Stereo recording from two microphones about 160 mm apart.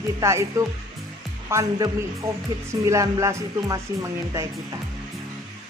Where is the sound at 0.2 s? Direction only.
20° right (ahead or behind).